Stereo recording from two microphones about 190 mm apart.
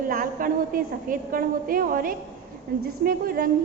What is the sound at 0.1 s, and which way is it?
A woman's voice, 50° right (ahead or behind).